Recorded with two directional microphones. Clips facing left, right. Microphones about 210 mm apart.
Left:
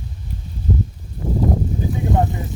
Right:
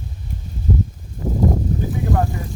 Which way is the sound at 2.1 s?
20° left (ahead or behind).